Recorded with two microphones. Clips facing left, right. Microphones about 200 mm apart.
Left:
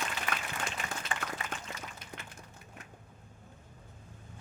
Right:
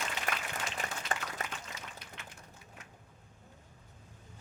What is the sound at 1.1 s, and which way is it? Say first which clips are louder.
Applause: right 1 dB; 40° right (ahead or behind).